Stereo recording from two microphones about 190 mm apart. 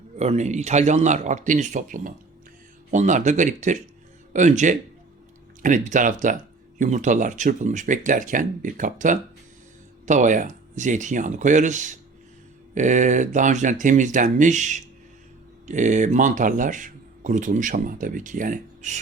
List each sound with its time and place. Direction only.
0.2 s speech: 35° right (ahead or behind)